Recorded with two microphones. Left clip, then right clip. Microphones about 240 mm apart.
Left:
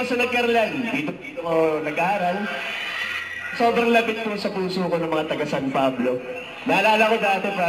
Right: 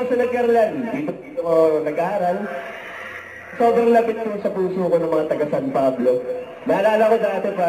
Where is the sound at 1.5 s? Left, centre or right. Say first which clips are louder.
Right 4 dB; left.